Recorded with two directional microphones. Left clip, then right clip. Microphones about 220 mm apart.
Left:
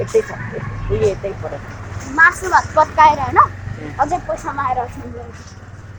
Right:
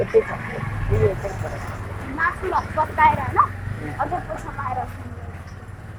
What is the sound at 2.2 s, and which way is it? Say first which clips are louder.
A woman's voice: left 9 dB; 35° left (ahead or behind).